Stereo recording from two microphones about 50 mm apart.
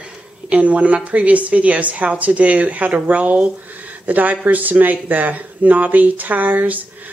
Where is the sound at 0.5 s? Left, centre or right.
Right.